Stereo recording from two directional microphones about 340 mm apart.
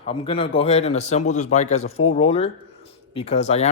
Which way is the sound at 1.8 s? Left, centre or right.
Left.